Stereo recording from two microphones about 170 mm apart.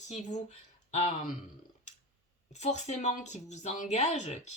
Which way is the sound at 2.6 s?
40° left (ahead or behind).